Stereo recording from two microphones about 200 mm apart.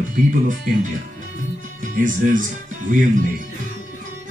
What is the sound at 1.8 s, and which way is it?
Speech, 40° right (ahead or behind).